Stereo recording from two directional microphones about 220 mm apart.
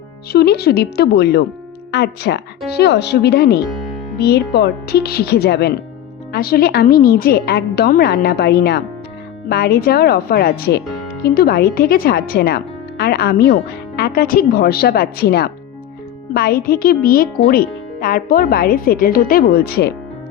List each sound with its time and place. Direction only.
0.3 s speech: 45° left (ahead or behind)